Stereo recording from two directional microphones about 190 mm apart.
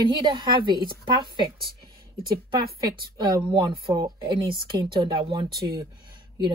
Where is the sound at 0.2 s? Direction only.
25° right (ahead or behind).